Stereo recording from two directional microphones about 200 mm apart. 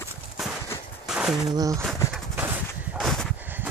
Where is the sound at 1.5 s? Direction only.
20° right (ahead or behind).